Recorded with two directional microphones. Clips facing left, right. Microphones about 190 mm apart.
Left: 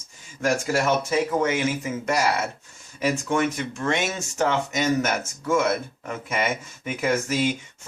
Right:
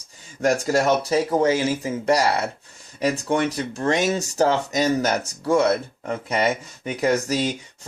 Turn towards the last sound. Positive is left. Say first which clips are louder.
# even
turn(degrees=-35)  # may be behind; listen again after turning